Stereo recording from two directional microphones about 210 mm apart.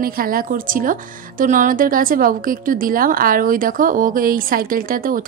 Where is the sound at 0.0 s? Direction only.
45° right (ahead or behind).